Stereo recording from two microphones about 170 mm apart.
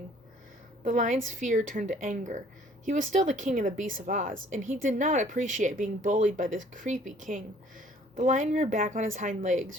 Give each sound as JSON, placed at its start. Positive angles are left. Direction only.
{"t": 0.9, "sound": "speech", "side_deg": -50}